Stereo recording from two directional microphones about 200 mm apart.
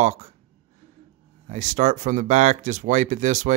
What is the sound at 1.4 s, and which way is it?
Speech, 40° right (ahead or behind).